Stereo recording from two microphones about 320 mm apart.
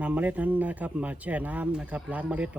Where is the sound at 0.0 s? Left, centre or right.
Centre.